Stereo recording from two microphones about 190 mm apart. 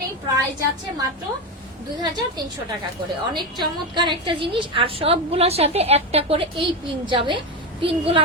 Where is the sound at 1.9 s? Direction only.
20° right (ahead or behind).